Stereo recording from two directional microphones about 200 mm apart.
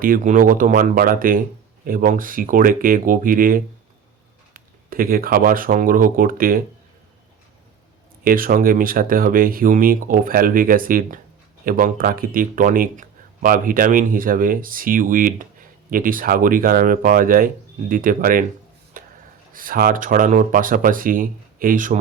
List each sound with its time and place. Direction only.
0.0 s speech: 40° right (ahead or behind)
8.2 s speech: 45° right (ahead or behind)
19.0 s a sound: 45° right (ahead or behind)
19.5 s speech: 45° right (ahead or behind)